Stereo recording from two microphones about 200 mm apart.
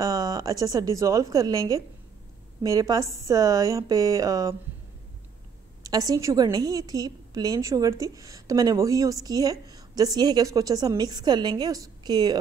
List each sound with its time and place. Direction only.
0.0 s a woman's voice: 20° right (ahead or behind)
5.9 s a woman's voice: 20° right (ahead or behind)